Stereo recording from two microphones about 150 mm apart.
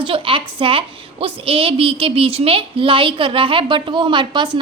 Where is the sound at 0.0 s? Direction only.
35° right (ahead or behind).